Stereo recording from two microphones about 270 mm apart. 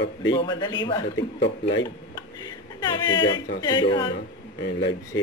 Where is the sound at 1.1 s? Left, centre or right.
Left.